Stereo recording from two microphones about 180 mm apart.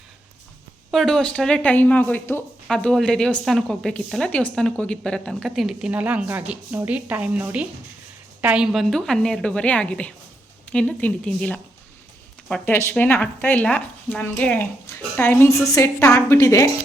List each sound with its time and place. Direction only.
0.9 s a woman's voice: centre (ahead or behind); by 16.6 s 15° left (ahead or behind)